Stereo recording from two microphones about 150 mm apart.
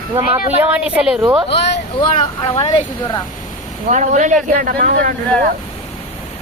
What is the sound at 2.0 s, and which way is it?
Speech, 35° left (ahead or behind).